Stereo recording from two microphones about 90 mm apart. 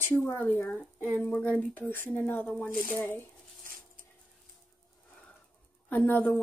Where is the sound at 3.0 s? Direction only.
25° left (ahead or behind).